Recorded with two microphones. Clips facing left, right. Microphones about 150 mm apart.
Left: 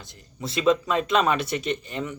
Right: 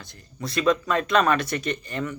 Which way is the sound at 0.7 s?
25° left (ahead or behind).